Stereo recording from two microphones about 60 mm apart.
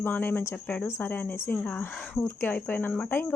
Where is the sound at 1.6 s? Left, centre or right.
Left.